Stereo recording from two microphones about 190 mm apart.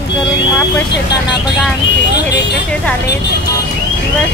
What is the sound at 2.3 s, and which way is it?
Vehicle, 60° left (ahead or behind).